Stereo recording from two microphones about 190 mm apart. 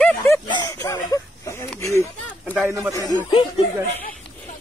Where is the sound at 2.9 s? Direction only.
20° left (ahead or behind).